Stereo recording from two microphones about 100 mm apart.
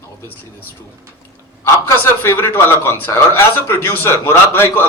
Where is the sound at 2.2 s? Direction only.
20° left (ahead or behind).